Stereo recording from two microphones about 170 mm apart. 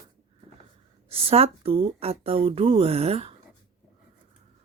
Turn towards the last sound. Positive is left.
turn(degrees=-35)  # may be behind; listen again after turning